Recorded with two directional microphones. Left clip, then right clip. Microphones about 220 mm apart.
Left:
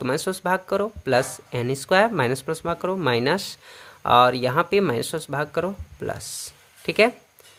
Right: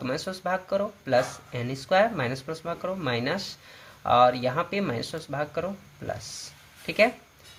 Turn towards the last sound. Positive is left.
turn(degrees=35)  # may be behind; listen again after turning